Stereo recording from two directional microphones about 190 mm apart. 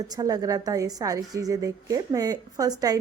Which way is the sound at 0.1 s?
20° right (ahead or behind).